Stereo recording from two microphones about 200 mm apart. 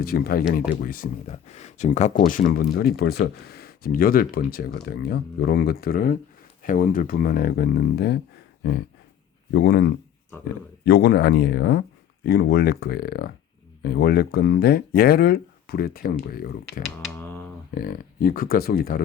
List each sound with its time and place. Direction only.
0.0 s speech: 50° left (ahead or behind)
1.3 s speech: 35° left (ahead or behind); by 8.2 s 55° left (ahead or behind)
9.5 s speech: 55° left (ahead or behind)